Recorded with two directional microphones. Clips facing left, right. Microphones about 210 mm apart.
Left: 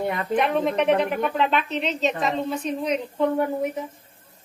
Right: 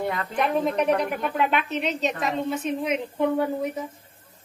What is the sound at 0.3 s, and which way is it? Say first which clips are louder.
A woman's voice: left 1 dB; centre (ahead or behind).